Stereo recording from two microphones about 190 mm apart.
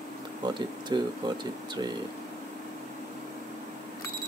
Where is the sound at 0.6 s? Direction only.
25° right (ahead or behind).